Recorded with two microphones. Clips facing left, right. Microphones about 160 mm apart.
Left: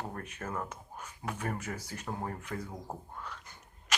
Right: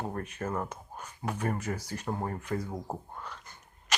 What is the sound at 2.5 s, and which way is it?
Speech, 20° right (ahead or behind).